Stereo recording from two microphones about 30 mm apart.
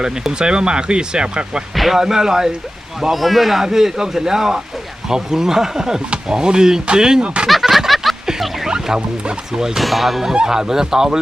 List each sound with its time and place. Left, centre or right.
0.0 s speech: right
1.7 s speech: centre
2.0 s speech: centre
3.1 s speech: centre
3.6 s speech: centre
7.4 s a sound: centre
9.0 s speech: right
9.5 s speech: centre
9.8 s speech: centre
10.3 s speech: right